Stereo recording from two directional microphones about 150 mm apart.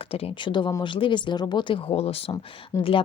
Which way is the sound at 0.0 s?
40° left (ahead or behind).